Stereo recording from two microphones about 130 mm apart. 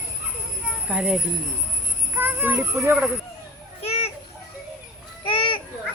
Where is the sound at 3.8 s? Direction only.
50° left (ahead or behind).